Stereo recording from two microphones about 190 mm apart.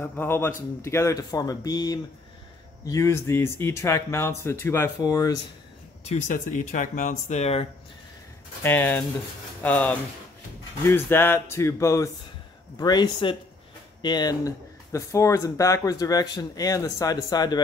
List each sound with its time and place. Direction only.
0.0 s speech: 10° left (ahead or behind)
6.0 s speech: 40° left (ahead or behind)
8.6 s speech: 10° left (ahead or behind)